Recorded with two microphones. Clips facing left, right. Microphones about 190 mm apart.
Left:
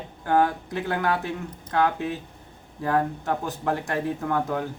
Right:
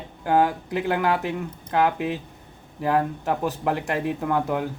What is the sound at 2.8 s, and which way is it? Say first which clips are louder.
Speech: right 1 dB; 20° right (ahead or behind).